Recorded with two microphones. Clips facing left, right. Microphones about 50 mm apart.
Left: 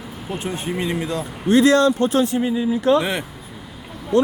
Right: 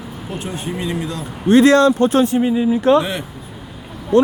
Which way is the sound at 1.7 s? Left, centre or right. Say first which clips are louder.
Right 3 dB; right.